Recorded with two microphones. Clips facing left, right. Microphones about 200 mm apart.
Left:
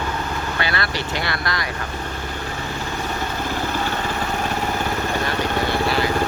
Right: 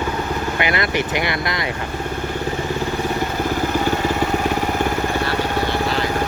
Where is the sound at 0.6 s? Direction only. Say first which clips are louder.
Right 5 dB; 20° right (ahead or behind).